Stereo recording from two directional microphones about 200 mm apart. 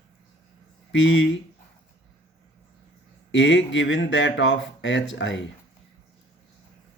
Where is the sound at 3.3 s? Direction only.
65° left (ahead or behind).